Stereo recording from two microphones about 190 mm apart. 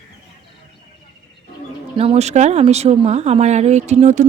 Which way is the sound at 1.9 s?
30° right (ahead or behind).